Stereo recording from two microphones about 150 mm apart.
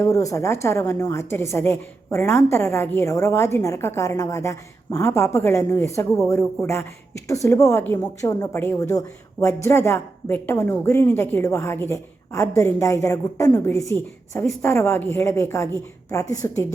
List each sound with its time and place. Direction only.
0.0 s a woman's voice: 20° left (ahead or behind)